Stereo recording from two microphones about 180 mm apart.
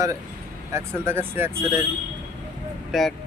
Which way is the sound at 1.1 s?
10° right (ahead or behind).